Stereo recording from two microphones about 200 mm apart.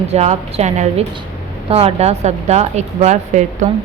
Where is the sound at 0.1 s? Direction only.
30° right (ahead or behind).